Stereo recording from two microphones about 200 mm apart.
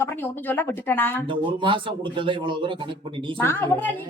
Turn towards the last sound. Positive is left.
turn(degrees=10)  # may be behind; listen again after turning